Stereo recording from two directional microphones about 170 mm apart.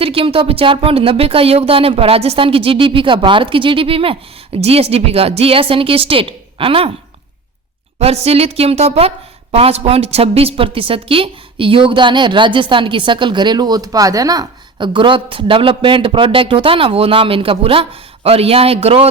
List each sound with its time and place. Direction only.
0.0 s a woman's voice: 35° right (ahead or behind)
7.9 s a woman's voice: 40° right (ahead or behind)